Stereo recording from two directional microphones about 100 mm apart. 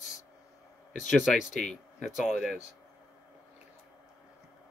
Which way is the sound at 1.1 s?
Centre (ahead or behind).